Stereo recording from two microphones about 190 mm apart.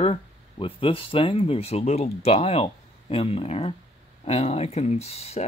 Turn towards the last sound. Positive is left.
turn(degrees=35)  # may be behind; listen again after turning